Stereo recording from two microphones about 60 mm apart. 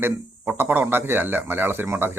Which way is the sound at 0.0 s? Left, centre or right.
Right.